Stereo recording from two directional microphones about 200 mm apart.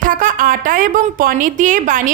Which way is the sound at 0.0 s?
40° right (ahead or behind).